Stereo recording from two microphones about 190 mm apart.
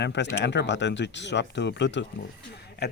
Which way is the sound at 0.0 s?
65° left (ahead or behind).